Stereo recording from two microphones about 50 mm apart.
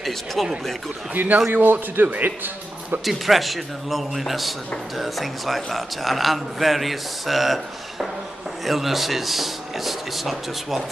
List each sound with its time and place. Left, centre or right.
0.0 s speech: centre
1.1 s speech: right
3.1 s a man's voice: centre